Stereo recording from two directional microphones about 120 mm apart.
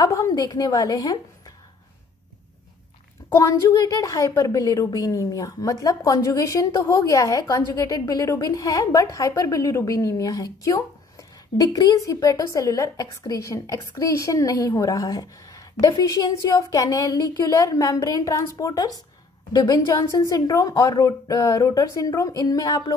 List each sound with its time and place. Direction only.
0.0 s speech: 30° left (ahead or behind)
3.3 s a woman's voice: 25° left (ahead or behind)